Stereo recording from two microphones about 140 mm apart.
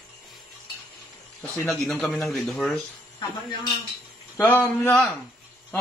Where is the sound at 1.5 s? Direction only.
5° left (ahead or behind).